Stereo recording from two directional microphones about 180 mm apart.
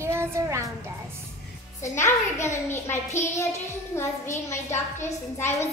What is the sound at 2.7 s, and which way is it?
A woman's voice, 15° left (ahead or behind).